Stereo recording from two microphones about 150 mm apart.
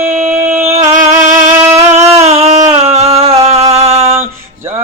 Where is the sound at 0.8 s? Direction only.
50° right (ahead or behind).